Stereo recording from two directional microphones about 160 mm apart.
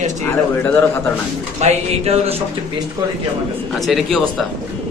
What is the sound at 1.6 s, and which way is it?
Speech, 40° right (ahead or behind).